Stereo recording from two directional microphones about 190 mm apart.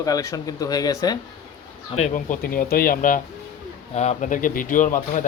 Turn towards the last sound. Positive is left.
turn(degrees=45)  # may be behind; listen again after turning